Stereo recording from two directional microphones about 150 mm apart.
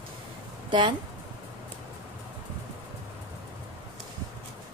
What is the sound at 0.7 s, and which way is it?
Speech, 30° right (ahead or behind).